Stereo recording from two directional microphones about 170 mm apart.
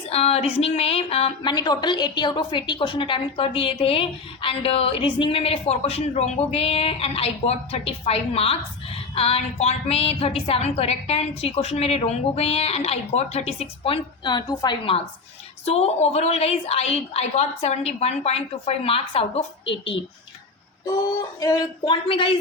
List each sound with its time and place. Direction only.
0.1 s a woman's voice: 35° left (ahead or behind)
1.5 s a woman's voice: 25° left (ahead or behind)
21.4 s speech: 20° left (ahead or behind)